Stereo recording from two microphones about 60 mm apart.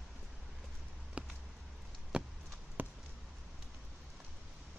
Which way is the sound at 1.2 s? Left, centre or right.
Centre.